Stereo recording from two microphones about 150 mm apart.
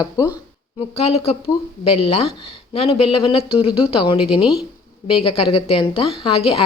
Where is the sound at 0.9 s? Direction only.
40° left (ahead or behind).